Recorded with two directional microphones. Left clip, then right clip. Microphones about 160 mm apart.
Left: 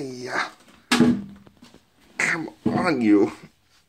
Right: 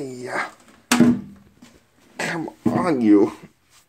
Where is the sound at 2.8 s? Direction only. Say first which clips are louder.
Right 2 dB; 15° right (ahead or behind).